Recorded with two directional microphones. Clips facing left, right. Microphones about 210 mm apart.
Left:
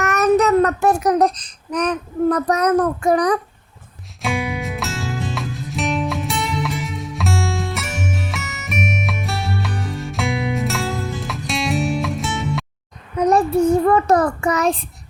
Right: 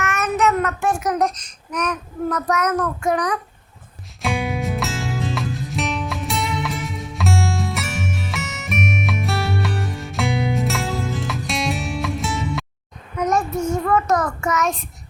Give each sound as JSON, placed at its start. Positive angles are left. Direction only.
{"t": 0.0, "sound": "child singing", "side_deg": 40}
{"t": 4.2, "sound": "music", "side_deg": 0}
{"t": 13.1, "sound": "a sound", "side_deg": 35}
{"t": 13.8, "sound": "child singing", "side_deg": 30}